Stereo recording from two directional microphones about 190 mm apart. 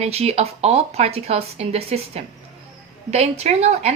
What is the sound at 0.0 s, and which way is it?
A woman's voice, 35° right (ahead or behind).